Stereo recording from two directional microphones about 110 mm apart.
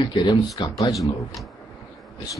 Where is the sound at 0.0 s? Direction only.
45° left (ahead or behind).